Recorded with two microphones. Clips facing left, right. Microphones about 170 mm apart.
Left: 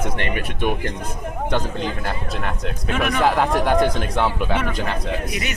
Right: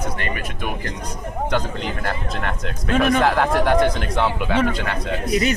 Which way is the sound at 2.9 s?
30° right (ahead or behind).